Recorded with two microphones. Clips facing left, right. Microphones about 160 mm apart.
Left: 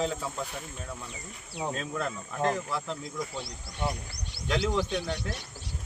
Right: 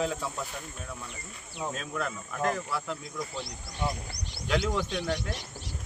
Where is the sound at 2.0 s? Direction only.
25° left (ahead or behind).